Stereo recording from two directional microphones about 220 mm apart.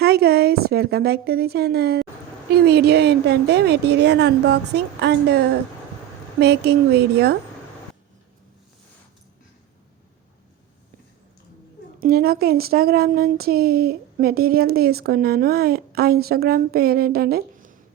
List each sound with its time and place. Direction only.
0.0 s a woman's voice: 45° right (ahead or behind)
11.9 s speech: 45° right (ahead or behind)